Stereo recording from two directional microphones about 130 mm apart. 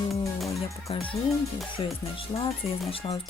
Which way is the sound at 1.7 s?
40° left (ahead or behind).